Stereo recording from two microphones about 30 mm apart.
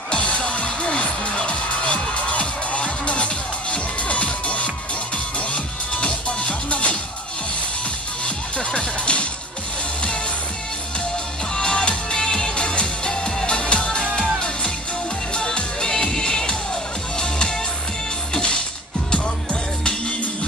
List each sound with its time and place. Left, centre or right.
0.1 s music: left
8.5 s music: left
11.5 s music: left
15.3 s music: left
18.3 s music: left